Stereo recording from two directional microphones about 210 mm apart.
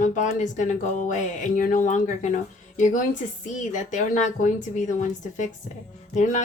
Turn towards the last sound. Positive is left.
turn(degrees=35)  # may be behind; listen again after turning